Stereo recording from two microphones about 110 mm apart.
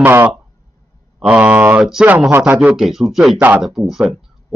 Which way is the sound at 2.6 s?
5° right (ahead or behind).